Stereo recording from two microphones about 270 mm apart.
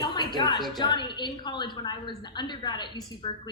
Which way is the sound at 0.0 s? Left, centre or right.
Centre.